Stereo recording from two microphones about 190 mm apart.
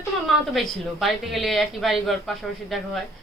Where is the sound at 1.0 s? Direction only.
Centre (ahead or behind).